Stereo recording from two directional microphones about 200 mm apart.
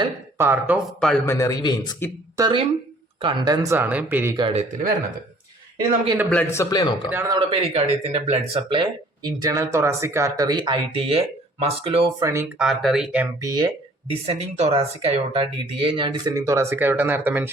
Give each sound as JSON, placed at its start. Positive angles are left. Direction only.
{"t": 0.3, "sound": "speech", "side_deg": -10}
{"t": 0.9, "sound": "speech", "side_deg": 5}
{"t": 1.4, "sound": "speech", "side_deg": 20}
{"t": 2.3, "sound": "speech", "side_deg": -20}
{"t": 4.4, "sound": "speech", "side_deg": -20}
{"t": 6.3, "sound": "speech", "side_deg": 15}
{"t": 7.1, "sound": "speech", "side_deg": -10}
{"t": 7.3, "sound": "speech", "side_deg": -30}
{"t": 12.2, "sound": "speech", "side_deg": -15}
{"t": 12.6, "sound": "speech", "side_deg": 0}
{"t": 13.4, "sound": "speech", "side_deg": -20}